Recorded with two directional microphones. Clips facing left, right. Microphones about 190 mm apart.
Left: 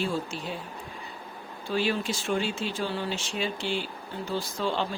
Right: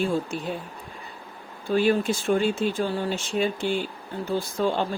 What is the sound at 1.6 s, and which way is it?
Speech, 50° right (ahead or behind).